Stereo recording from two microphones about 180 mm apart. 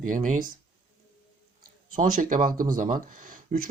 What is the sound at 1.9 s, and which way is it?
Speech, 50° right (ahead or behind).